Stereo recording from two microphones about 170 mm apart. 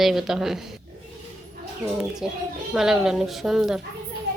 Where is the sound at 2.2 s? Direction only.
5° right (ahead or behind).